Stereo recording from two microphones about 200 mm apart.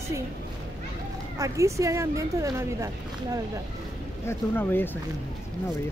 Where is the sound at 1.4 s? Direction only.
15° right (ahead or behind).